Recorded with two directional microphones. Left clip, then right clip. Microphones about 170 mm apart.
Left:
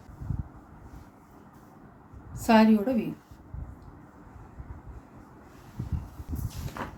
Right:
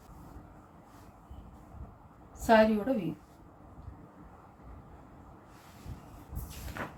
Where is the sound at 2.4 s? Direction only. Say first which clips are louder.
Left 1 dB; 50° left (ahead or behind).